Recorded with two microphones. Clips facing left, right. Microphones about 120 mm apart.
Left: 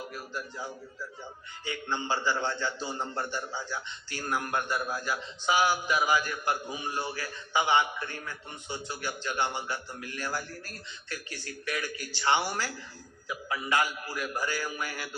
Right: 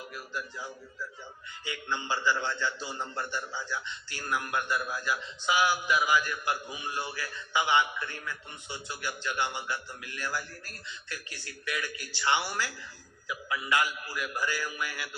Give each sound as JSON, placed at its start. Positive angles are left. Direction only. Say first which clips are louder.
{"t": 0.0, "sound": "a sound", "louder": "left 1 dB", "side_deg": 40}
{"t": 1.6, "sound": "a man's voice", "louder": "left 2 dB", "side_deg": 40}
{"t": 2.9, "sound": "a man's voice", "louder": "left 2 dB", "side_deg": 15}
{"t": 3.6, "sound": "a man's voice", "louder": "even", "side_deg": 45}